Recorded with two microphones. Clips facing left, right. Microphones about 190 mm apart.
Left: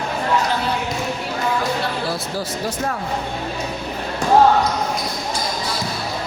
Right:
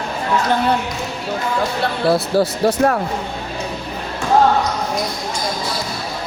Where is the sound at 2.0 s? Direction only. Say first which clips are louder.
Right 9 dB; 65° right (ahead or behind).